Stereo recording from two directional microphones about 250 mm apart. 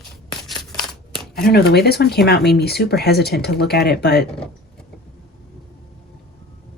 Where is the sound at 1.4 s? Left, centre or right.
Left.